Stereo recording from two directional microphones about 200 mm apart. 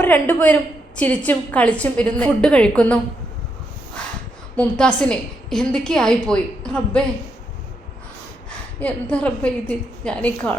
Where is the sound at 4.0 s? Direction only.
5° left (ahead or behind).